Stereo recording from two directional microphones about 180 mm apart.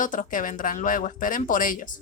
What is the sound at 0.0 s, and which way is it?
Speech, 45° left (ahead or behind).